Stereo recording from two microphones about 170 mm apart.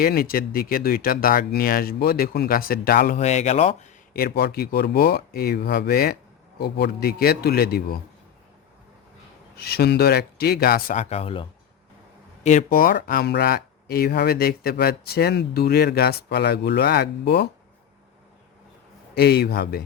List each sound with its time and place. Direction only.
0.0 s speech: 60° left (ahead or behind)
3.2 s speech: 40° left (ahead or behind)
4.1 s speech: 65° left (ahead or behind)
9.6 s speech: 65° left (ahead or behind)
11.0 s speech: 35° left (ahead or behind); by 17.5 s 75° left (ahead or behind)
19.1 s speech: 70° left (ahead or behind)